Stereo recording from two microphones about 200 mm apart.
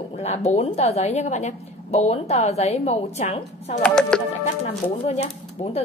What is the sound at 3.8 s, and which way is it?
Speech, 5° left (ahead or behind).